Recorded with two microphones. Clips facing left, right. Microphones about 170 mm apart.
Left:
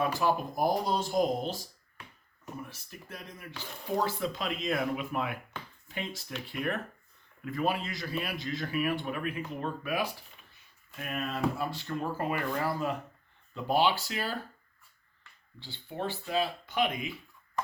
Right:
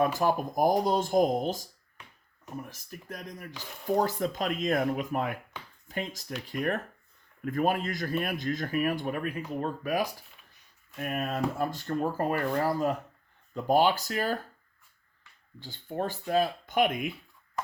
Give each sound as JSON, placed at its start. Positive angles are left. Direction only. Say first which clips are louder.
{"t": 0.0, "sound": "speech", "louder": "right 3 dB", "side_deg": -45}
{"t": 15.6, "sound": "speech", "louder": "right 3 dB", "side_deg": -45}